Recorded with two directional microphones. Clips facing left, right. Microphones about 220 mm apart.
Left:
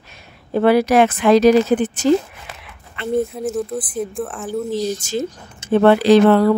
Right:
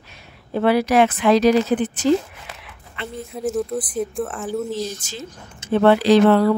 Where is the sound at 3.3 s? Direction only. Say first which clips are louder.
Even; centre (ahead or behind).